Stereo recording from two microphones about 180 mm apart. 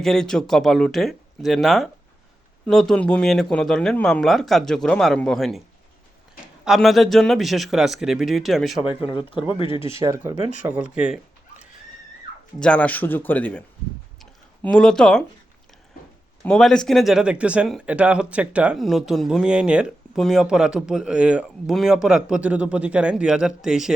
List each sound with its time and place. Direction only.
0.0 s speech: 5° left (ahead or behind)
6.7 s speech: centre (ahead or behind)
9.6 s speech: 30° left (ahead or behind)
10.0 s speech: 15° right (ahead or behind)
12.5 s speech: 5° left (ahead or behind)
14.2 s a sound: 5° left (ahead or behind)
16.4 s speech: 5° left (ahead or behind)